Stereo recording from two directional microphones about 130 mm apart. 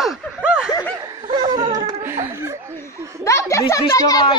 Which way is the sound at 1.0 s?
35° right (ahead or behind).